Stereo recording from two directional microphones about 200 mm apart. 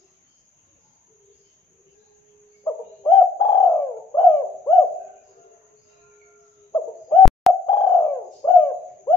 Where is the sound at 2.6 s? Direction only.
15° left (ahead or behind).